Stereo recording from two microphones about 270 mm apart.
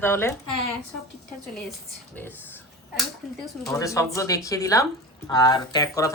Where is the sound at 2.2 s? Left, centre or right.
Centre.